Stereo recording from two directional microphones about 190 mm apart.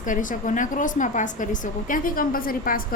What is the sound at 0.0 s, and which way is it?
A woman's voice, 45° left (ahead or behind).